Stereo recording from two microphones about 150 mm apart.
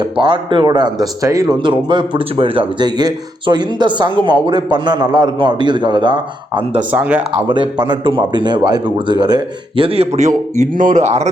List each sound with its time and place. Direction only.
0.0 s speech: 35° right (ahead or behind)
6.9 s speech: 10° right (ahead or behind)
7.3 s speech: 35° right (ahead or behind)
10.6 s speech: 55° right (ahead or behind)